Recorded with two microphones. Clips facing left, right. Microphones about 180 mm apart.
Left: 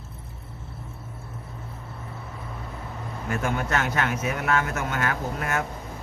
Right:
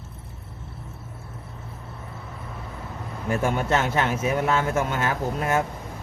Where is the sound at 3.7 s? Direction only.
25° right (ahead or behind).